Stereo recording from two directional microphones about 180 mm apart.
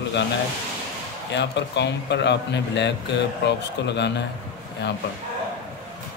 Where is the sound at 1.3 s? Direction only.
75° left (ahead or behind).